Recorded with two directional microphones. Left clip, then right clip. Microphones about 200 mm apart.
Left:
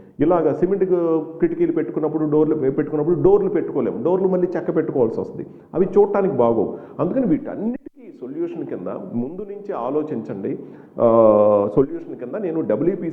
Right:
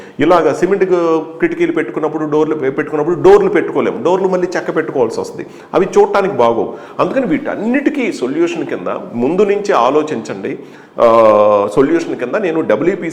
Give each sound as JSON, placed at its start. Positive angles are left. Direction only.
{"t": 0.2, "sound": "speech", "side_deg": -15}
{"t": 0.4, "sound": "speech", "side_deg": -5}
{"t": 3.0, "sound": "a man's voice", "side_deg": -20}
{"t": 3.3, "sound": "speech", "side_deg": -5}